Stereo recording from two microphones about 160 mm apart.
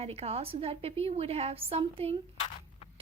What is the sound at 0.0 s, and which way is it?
A woman's voice, 40° right (ahead or behind).